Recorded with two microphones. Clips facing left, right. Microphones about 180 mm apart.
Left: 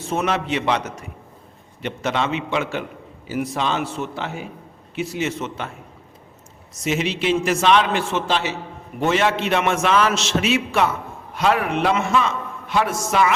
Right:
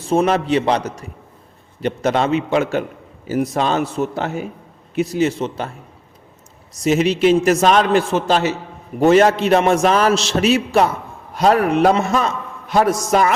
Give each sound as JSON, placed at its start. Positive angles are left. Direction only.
{"t": 0.0, "sound": "a man's voice", "side_deg": -35}
{"t": 6.7, "sound": "a man's voice", "side_deg": -40}